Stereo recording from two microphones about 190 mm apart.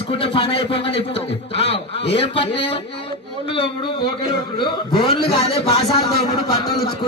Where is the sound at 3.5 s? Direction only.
25° left (ahead or behind).